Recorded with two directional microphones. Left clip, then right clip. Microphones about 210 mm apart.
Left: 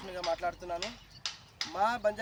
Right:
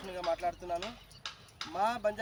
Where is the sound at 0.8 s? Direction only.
40° left (ahead or behind).